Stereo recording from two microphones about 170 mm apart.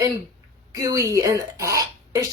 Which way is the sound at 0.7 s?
20° right (ahead or behind).